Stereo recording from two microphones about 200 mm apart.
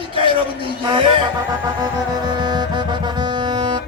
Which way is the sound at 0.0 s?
25° right (ahead or behind).